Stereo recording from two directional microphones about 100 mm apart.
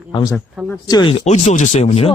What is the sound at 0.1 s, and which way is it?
Speech, 55° left (ahead or behind).